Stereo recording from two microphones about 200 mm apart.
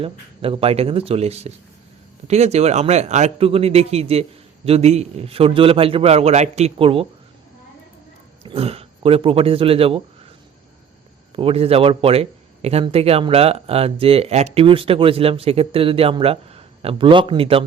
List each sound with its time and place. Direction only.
0.0 s a man's voice: 30° right (ahead or behind)
8.4 s speech: 30° right (ahead or behind)
11.3 s speech: 30° right (ahead or behind)